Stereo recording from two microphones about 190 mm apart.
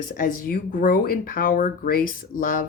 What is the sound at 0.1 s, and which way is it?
Speech, 45° left (ahead or behind).